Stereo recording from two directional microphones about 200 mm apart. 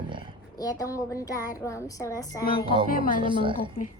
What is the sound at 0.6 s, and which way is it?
A woman's voice, 20° left (ahead or behind).